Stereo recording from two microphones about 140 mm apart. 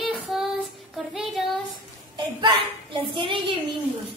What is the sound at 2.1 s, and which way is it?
A woman's voice, 35° right (ahead or behind).